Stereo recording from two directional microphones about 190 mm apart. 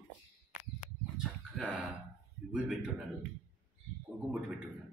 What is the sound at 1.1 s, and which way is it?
Chicken, 5° right (ahead or behind).